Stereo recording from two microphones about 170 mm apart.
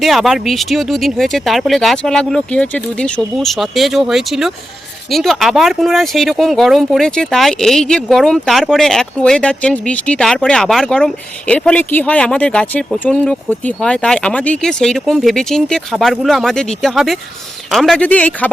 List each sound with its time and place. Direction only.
0.0 s speech: centre (ahead or behind)